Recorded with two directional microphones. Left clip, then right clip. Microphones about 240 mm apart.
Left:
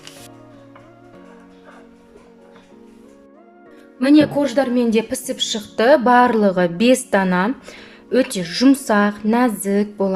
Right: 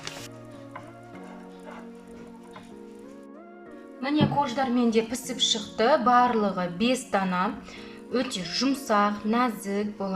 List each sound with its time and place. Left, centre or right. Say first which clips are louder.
4.0 s a woman's voice: left 11 dB; left